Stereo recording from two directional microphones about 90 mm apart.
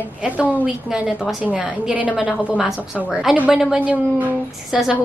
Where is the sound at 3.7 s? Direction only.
15° right (ahead or behind).